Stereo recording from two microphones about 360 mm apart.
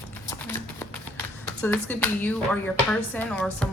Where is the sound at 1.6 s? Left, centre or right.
Centre.